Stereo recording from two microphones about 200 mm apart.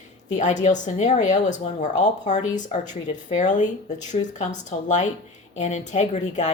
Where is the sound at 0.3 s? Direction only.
35° left (ahead or behind).